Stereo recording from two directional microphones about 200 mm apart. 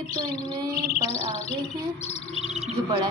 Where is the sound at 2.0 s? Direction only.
30° left (ahead or behind).